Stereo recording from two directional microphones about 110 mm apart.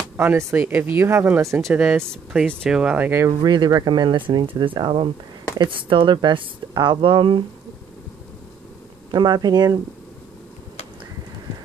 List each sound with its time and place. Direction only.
0.2 s speech: 25° right (ahead or behind)
3.3 s speech: 40° right (ahead or behind)
9.1 s speech: 40° right (ahead or behind)